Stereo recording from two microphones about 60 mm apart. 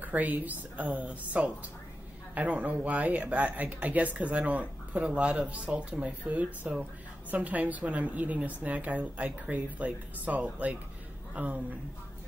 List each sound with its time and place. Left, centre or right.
0.0 s speech: right